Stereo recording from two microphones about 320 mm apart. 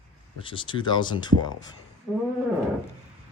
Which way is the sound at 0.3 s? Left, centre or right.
Centre.